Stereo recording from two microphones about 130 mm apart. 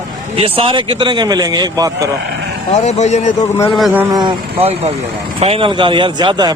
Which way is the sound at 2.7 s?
60° left (ahead or behind).